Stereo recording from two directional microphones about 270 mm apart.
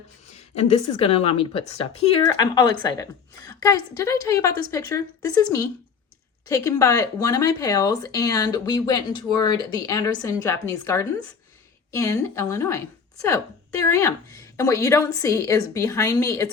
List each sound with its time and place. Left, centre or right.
0.7 s a woman's voice: left
13.8 s speech: centre